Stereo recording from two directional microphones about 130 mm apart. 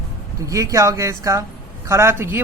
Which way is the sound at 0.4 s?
25° right (ahead or behind).